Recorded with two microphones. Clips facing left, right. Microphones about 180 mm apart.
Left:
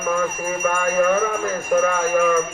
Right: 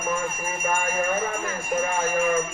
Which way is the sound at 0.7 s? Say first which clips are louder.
Left 6 dB; 90° left.